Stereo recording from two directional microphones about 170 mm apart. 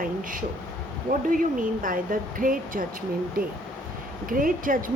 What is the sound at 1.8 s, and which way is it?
Speech, 55° right (ahead or behind).